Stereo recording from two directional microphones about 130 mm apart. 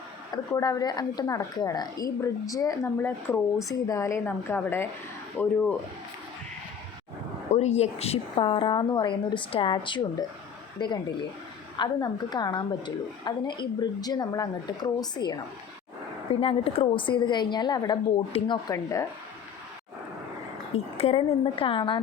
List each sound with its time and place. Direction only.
0.5 s a woman's voice: 25° left (ahead or behind)
7.5 s a woman's voice: 55° left (ahead or behind); by 15.4 s 35° left (ahead or behind)
16.3 s a woman's voice: 45° left (ahead or behind)
20.7 s a woman's voice: 50° left (ahead or behind)